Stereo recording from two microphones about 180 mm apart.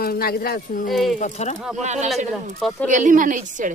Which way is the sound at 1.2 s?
40° left (ahead or behind).